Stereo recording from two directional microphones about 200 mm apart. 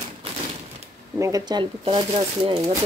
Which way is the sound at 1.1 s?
15° right (ahead or behind).